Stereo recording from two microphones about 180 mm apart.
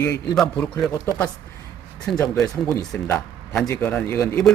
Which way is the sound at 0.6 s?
Centre (ahead or behind).